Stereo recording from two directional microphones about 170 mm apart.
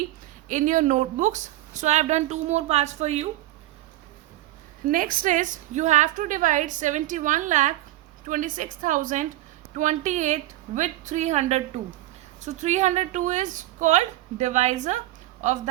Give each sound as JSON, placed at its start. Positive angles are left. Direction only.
{"t": 0.4, "sound": "a woman's voice", "side_deg": -50}
{"t": 4.9, "sound": "a woman's voice", "side_deg": -55}